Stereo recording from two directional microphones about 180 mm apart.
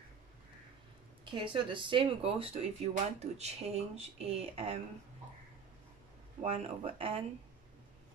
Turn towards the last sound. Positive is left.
turn(degrees=-30)  # may be behind; listen again after turning